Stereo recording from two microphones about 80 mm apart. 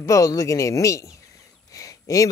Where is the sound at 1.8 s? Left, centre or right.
Left.